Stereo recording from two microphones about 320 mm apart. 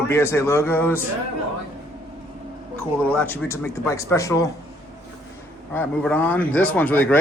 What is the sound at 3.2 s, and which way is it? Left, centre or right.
Speech, centre.